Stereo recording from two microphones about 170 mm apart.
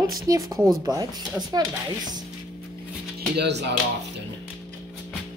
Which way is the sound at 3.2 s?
80° right.